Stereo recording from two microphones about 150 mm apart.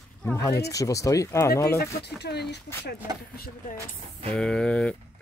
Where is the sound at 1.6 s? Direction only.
90° left.